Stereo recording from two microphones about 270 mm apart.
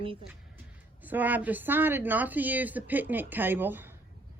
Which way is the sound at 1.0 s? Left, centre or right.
Centre.